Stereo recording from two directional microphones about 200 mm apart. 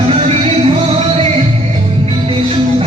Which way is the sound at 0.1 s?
30° right (ahead or behind).